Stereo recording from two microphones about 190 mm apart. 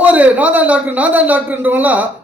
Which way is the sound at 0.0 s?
10° right (ahead or behind).